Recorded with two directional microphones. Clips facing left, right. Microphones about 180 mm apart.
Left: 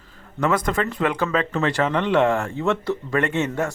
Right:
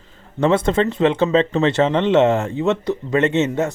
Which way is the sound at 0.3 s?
25° right (ahead or behind).